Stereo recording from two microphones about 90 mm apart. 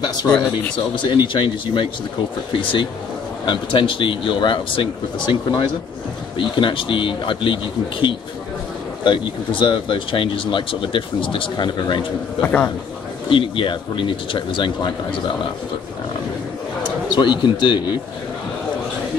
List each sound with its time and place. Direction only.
0.0 s speech: 50° left (ahead or behind)
0.9 s speech: 65° left (ahead or behind)
9.0 s speech: 60° left (ahead or behind)
12.4 s a man's voice: 15° left (ahead or behind)
13.3 s speech: 70° left (ahead or behind)
17.1 s speech: 60° left (ahead or behind)